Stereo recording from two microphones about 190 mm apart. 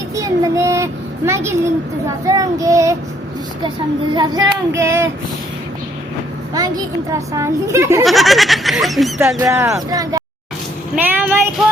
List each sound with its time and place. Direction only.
0.2 s a child's voice: 15° right (ahead or behind)
4.1 s a woman's voice: 20° right (ahead or behind)
6.5 s a woman's voice: 20° right (ahead or behind)
8.0 s speech: centre (ahead or behind)
9.4 s a woman's voice: 15° right (ahead or behind)
10.9 s a sound: 10° right (ahead or behind)